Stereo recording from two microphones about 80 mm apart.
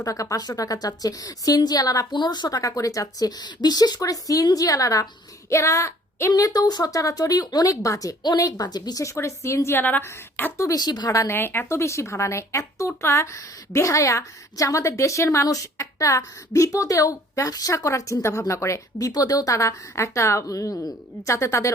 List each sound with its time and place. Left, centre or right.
0.0 s speech: left
2.1 s a woman's voice: left
6.3 s speech: left
9.1 s a woman's voice: left
9.7 s a woman's voice: left
10.6 s a woman's voice: left
11.3 s a woman's voice: left